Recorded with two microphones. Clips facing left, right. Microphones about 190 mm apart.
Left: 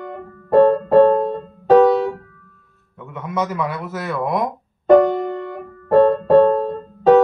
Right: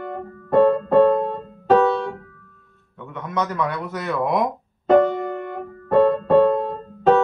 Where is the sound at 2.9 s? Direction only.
5° left (ahead or behind).